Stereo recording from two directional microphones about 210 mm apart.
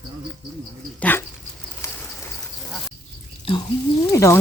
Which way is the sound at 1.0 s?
10° left (ahead or behind).